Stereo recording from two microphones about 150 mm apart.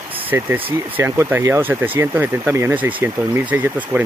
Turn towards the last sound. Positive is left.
turn(degrees=-10)  # may be behind; listen again after turning